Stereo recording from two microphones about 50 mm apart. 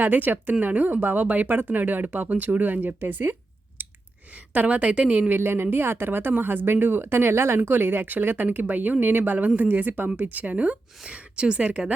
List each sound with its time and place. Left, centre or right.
0.0 s speech: right
3.8 s clicking: right
4.5 s speech: right
5.3 s speech: right
7.7 s speech: right
11.0 s speech: centre